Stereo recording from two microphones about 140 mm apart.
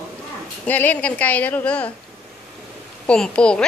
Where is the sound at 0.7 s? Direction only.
10° left (ahead or behind).